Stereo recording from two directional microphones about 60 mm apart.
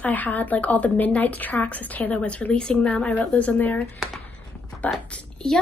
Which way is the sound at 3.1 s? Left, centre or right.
Left.